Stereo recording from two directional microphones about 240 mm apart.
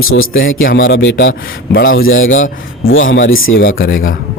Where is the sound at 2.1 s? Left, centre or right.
Left.